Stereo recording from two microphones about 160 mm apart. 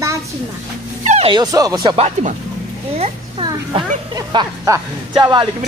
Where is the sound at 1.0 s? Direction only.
45° right (ahead or behind).